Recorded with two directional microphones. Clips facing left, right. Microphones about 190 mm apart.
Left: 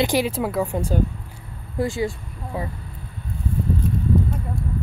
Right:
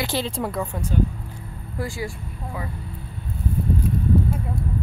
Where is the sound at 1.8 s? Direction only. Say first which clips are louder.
Left 6 dB; 25° left (ahead or behind).